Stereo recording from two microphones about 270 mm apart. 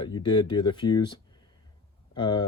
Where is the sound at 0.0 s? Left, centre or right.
Centre.